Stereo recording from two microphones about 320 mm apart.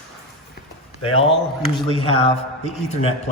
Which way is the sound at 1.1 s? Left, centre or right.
Centre.